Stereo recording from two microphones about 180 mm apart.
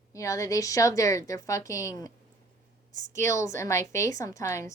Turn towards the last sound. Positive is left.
turn(degrees=15)  # may be behind; listen again after turning